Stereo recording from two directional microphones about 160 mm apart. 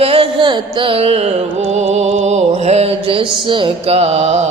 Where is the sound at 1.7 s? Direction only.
45° right (ahead or behind).